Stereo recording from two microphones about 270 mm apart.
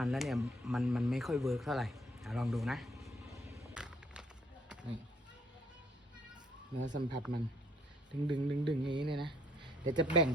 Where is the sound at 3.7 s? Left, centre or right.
Centre.